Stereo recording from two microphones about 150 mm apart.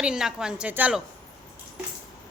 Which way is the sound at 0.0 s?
5° right (ahead or behind).